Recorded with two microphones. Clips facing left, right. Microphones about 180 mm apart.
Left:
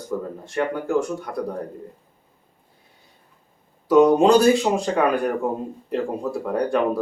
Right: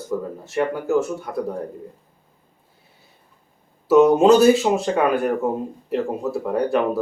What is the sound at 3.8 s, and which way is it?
Speech, 5° right (ahead or behind).